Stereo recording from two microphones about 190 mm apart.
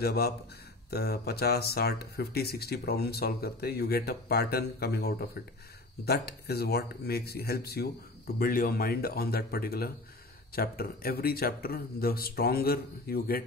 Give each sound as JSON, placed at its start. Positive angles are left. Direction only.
{"t": 0.0, "sound": "speech", "side_deg": 55}